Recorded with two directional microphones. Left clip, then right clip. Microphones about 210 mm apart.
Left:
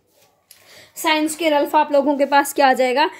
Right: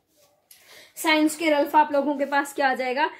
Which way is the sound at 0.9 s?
30° left (ahead or behind).